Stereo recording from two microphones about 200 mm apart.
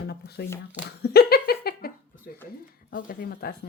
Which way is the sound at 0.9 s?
55° left (ahead or behind).